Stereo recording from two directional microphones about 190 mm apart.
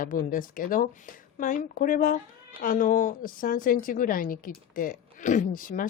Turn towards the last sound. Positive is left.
turn(degrees=45)  # may be behind; listen again after turning